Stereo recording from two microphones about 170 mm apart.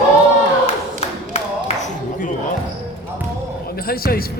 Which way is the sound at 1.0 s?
40° left (ahead or behind).